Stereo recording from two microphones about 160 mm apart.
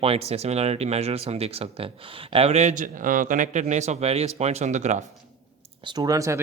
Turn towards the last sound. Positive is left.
turn(degrees=-20)  # may be behind; listen again after turning